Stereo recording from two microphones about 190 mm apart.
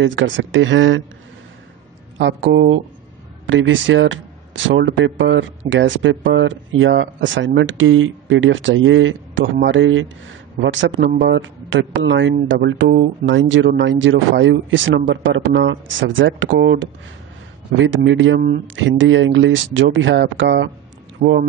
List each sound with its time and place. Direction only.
0.0 s speech: 75° right (ahead or behind)
2.1 s speech: 75° right (ahead or behind)
11.1 s speech: 65° right (ahead or behind)
21.2 s speech: 50° right (ahead or behind)